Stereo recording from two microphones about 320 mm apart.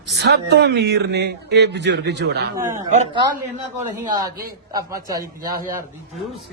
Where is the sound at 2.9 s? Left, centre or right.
Right.